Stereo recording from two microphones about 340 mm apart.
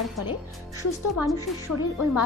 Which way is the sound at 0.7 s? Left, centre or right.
Centre.